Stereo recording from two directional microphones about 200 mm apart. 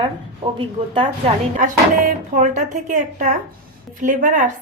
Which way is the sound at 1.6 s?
40° right (ahead or behind).